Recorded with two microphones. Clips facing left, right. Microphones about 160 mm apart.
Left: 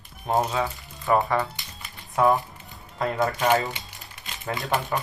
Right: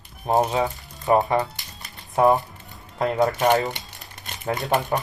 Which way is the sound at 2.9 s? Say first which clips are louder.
Right 4 dB; 35° right (ahead or behind).